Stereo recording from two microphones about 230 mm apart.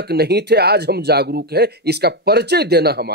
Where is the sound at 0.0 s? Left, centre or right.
Right.